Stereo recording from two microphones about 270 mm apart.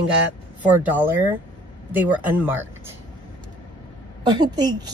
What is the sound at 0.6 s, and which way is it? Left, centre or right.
Speech, centre.